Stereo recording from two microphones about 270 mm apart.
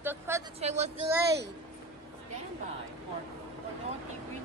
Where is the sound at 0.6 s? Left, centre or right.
Right.